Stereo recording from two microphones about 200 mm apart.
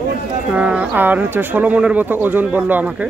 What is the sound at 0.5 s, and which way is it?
Speech, 5° right (ahead or behind).